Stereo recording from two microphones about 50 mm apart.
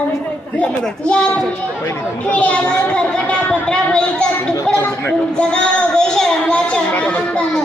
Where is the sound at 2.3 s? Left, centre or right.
Left.